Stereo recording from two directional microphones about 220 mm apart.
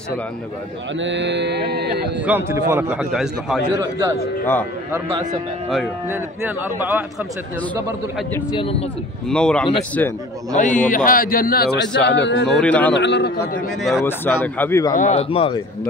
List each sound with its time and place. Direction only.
0.9 s speech: 55° right (ahead or behind)
2.2 s a man's voice: 10° right (ahead or behind)
4.9 s a man's voice: 15° right (ahead or behind)
6.8 s a man's voice: 10° right (ahead or behind)
8.5 s speech: 25° left (ahead or behind)
9.3 s a man's voice: 5° left (ahead or behind)
10.5 s a man's voice: 35° left (ahead or behind); by 12.4 s 55° left (ahead or behind)
12.4 s a man's voice: 5° left (ahead or behind)
12.9 s a man's voice: 50° left (ahead or behind)
14.0 s speech: 10° left (ahead or behind)
15.0 s speech: 30° left (ahead or behind)